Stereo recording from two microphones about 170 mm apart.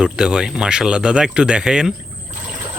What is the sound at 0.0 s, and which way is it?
Speech, 5° right (ahead or behind).